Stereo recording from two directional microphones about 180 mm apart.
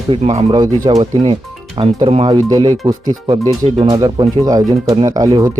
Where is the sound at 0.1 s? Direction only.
35° right (ahead or behind).